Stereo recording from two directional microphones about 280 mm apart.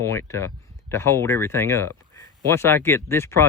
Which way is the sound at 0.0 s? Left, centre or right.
Centre.